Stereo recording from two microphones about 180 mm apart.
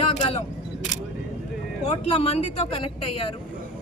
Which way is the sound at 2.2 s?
35° left (ahead or behind).